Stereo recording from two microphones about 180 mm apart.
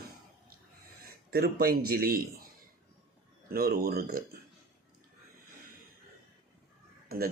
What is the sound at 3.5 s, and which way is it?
Speech, 60° right (ahead or behind).